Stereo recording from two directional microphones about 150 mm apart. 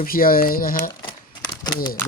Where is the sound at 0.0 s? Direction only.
75° left (ahead or behind).